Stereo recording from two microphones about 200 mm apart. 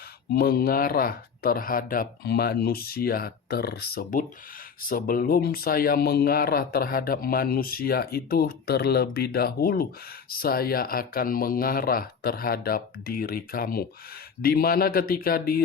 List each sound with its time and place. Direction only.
0.3 s speech: 50° left (ahead or behind)